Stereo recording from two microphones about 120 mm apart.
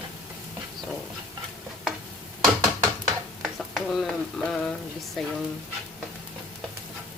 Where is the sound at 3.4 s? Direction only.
Centre (ahead or behind).